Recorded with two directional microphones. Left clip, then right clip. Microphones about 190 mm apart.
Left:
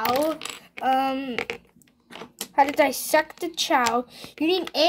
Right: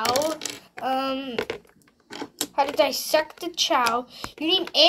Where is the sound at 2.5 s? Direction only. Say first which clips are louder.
Left 2 dB; 45° left (ahead or behind).